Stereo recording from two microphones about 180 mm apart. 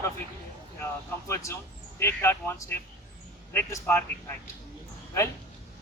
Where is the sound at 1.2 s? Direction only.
15° left (ahead or behind).